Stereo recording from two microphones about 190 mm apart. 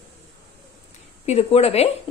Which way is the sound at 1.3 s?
30° left (ahead or behind).